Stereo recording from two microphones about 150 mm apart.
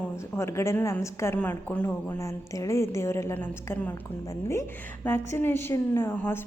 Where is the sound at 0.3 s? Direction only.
20° left (ahead or behind).